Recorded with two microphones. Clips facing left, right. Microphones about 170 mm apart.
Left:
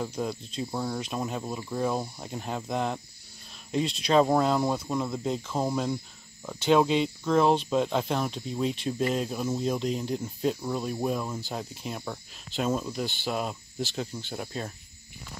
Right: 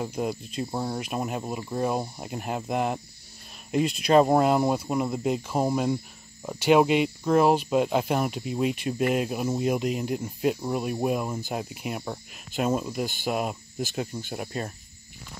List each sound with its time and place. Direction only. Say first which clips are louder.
0.0 s speech: right 2 dB; 10° right (ahead or behind)
3.8 s speech: right 4 dB; 55° right (ahead or behind)
4.4 s speech: right 3 dB; 10° right (ahead or behind)
12.0 s speech: right 2 dB; 20° right (ahead or behind)
12.6 s speech: right 2 dB; 10° right (ahead or behind)